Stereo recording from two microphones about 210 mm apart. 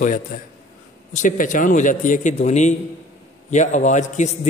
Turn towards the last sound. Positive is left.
turn(degrees=35)  # may be behind; listen again after turning